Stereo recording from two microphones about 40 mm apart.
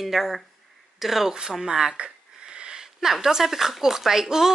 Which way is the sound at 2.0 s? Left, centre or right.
Right.